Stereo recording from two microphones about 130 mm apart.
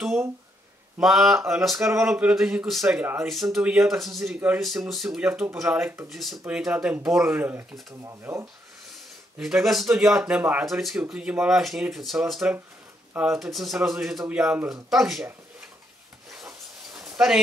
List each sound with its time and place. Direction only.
0.9 s speech: centre (ahead or behind)
1.8 s speech: 20° right (ahead or behind)
2.0 s speech: 5° right (ahead or behind)
3.3 s speech: centre (ahead or behind)
6.0 s speech: centre (ahead or behind)
7.3 s speech: 15° right (ahead or behind)
9.4 s speech: centre (ahead or behind)